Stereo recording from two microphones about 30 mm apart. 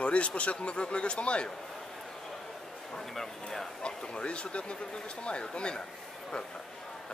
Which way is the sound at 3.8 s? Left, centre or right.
Left.